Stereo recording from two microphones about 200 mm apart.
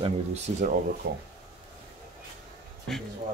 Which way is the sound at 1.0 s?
55° right (ahead or behind).